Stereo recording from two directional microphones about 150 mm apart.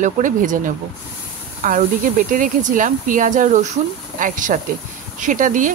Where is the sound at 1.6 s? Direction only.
60° right (ahead or behind).